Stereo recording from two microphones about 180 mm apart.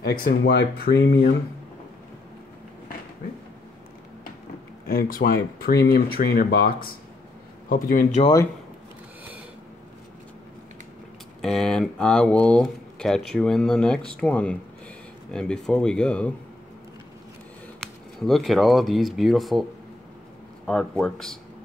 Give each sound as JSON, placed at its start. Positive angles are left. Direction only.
{"t": 0.0, "sound": "speech", "side_deg": 60}
{"t": 4.8, "sound": "speech", "side_deg": 55}
{"t": 8.2, "sound": "speech", "side_deg": 20}
{"t": 11.4, "sound": "speech", "side_deg": 0}
{"t": 17.7, "sound": "speech", "side_deg": 0}
{"t": 20.6, "sound": "speech", "side_deg": 5}